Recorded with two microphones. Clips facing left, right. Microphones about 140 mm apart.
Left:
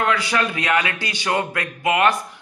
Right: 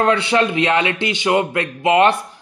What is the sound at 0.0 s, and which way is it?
A man's voice, 30° right (ahead or behind).